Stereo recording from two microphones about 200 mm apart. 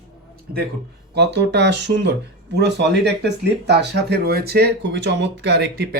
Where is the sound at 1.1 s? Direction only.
55° right (ahead or behind).